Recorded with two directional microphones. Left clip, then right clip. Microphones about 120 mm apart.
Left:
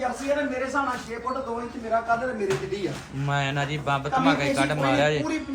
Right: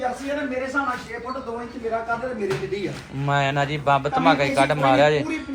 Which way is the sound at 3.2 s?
15° left (ahead or behind).